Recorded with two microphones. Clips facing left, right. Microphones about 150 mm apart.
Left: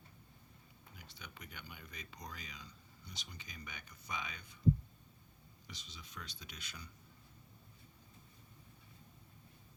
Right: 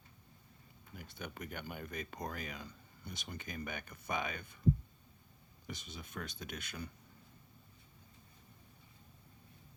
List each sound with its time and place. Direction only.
0.9 s speech: 50° right (ahead or behind)
5.6 s speech: 55° right (ahead or behind)